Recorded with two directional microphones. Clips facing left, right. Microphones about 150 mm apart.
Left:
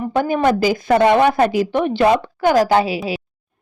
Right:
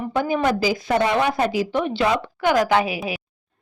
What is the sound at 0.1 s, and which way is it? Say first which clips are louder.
A woman's voice: left 4 dB; 55° left (ahead or behind).